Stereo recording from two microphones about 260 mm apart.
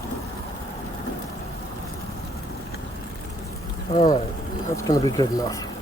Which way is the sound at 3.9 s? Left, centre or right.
Centre.